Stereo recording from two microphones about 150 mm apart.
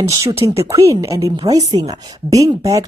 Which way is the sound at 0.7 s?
20° right (ahead or behind).